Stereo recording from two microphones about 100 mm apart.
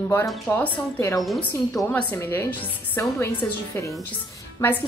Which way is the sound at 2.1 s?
25° left (ahead or behind).